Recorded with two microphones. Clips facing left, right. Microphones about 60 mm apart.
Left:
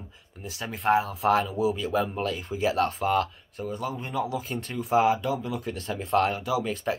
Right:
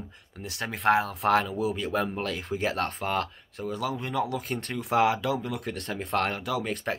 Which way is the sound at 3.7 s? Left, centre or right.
Right.